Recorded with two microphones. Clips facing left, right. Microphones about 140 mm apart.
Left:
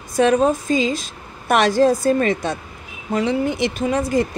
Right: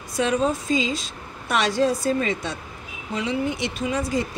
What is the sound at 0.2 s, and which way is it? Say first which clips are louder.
A woman's voice: left 6 dB; 50° left (ahead or behind).